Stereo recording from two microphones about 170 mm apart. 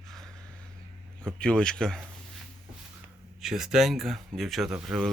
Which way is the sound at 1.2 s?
5° left (ahead or behind).